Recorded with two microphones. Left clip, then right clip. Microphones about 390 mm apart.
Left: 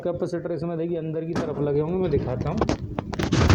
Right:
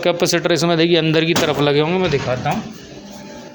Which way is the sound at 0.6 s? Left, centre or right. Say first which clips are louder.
Right 13 dB; left.